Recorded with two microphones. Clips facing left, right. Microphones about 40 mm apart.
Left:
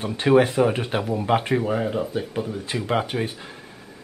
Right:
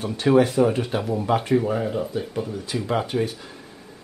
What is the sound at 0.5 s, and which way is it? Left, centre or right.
Speech, left.